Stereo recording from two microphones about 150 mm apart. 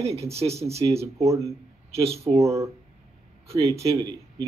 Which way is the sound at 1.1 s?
20° right (ahead or behind).